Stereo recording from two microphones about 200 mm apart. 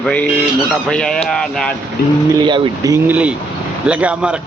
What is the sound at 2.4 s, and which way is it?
Speech, 25° right (ahead or behind).